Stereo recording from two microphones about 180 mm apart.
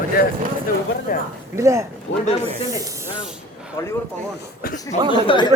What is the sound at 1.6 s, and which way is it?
Speech, 15° right (ahead or behind).